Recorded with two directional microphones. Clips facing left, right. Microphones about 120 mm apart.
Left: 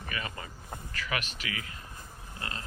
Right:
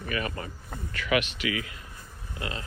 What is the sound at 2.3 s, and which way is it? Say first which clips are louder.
Pig: right 5 dB; 35° left (ahead or behind).